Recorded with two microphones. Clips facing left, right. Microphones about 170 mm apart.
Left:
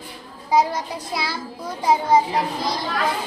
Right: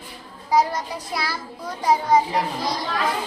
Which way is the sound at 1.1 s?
25° left (ahead or behind).